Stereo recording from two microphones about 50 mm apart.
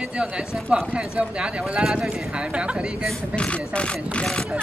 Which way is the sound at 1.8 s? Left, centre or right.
Centre.